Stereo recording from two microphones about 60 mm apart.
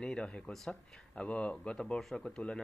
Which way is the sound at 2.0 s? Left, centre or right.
Centre.